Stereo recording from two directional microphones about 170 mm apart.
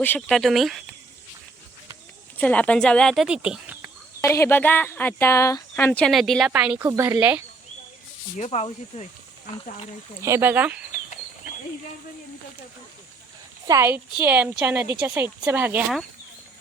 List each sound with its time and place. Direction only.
0.0 s speech: 5° left (ahead or behind)
2.4 s speech: 10° left (ahead or behind)
4.2 s speech: 15° left (ahead or behind); by 7.4 s 10° right (ahead or behind)
8.4 s speech: 35° left (ahead or behind)
10.2 s speech: 15° right (ahead or behind)
13.7 s speech: 15° right (ahead or behind)